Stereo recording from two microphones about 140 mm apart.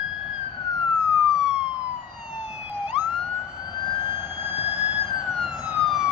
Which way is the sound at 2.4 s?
5° right (ahead or behind).